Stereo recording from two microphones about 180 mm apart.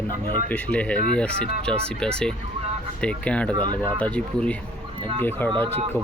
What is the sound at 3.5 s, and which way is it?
Speech, 25° right (ahead or behind).